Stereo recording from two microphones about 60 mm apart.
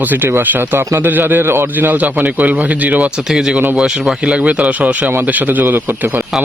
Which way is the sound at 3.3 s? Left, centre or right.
Centre.